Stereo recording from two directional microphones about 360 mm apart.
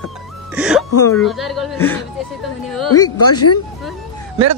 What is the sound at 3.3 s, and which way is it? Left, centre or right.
Speech, left.